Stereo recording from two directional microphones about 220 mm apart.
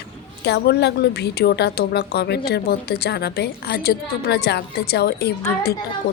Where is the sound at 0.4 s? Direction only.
50° left (ahead or behind).